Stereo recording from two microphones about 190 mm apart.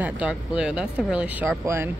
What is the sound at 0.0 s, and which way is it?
Speech, 5° right (ahead or behind).